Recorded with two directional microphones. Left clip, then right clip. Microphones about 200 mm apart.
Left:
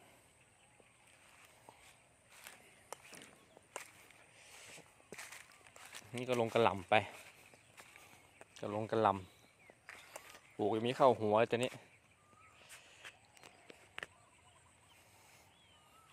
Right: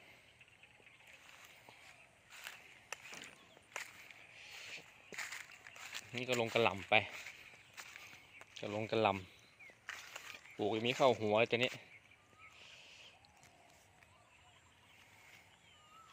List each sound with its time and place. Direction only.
2.3 s a sound: 10° left (ahead or behind)
4.4 s walk: 10° left (ahead or behind)
6.2 s speech: 15° left (ahead or behind)
7.1 s speech: 5° left (ahead or behind)
7.8 s walk: 10° left (ahead or behind)
8.7 s speech: 5° left (ahead or behind)
9.8 s a sound: 10° left (ahead or behind)